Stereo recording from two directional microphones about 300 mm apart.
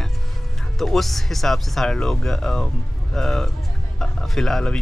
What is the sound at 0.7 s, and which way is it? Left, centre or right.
Speech, centre.